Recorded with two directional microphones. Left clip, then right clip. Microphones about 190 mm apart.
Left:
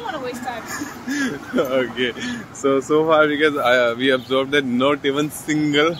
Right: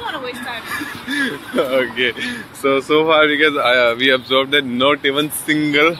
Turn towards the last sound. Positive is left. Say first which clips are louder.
# right 4 dB
turn(degrees=-5)  # may be behind; listen again after turning